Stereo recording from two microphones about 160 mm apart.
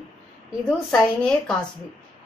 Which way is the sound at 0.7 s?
5° left (ahead or behind).